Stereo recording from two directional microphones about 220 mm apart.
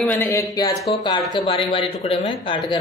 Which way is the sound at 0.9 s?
25° left (ahead or behind).